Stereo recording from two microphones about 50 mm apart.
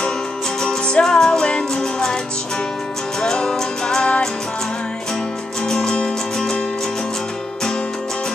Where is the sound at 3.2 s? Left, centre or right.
Centre.